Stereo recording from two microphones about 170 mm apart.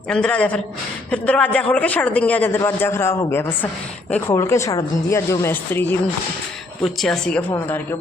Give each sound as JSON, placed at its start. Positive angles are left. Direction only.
{"t": 0.1, "sound": "a man's voice", "side_deg": 5}
{"t": 6.8, "sound": "a man's voice", "side_deg": 0}